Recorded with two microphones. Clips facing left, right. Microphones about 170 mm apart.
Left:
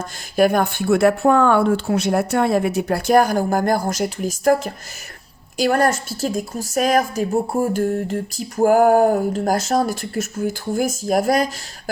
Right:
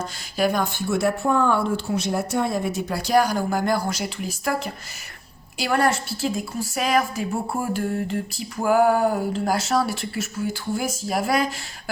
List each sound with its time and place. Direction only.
0.0 s a woman's voice: 50° left (ahead or behind)